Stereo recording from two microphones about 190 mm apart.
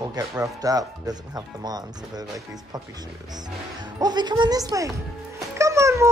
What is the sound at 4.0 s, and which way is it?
Speech, 20° right (ahead or behind).